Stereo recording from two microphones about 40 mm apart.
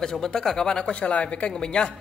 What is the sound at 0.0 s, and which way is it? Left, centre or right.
Speech, centre.